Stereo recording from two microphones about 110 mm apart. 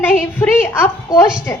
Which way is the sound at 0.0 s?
20° left (ahead or behind).